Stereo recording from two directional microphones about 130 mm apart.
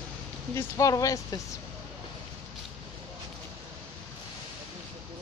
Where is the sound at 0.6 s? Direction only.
25° left (ahead or behind).